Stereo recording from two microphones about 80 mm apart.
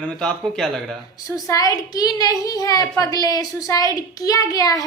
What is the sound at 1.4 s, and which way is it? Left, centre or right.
A woman's voice, left.